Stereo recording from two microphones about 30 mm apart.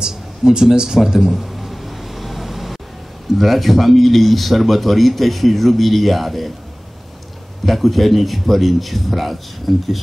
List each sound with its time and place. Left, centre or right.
0.0 s a sound: right; by 2.8 s centre
3.3 s speech: centre
7.6 s speech: centre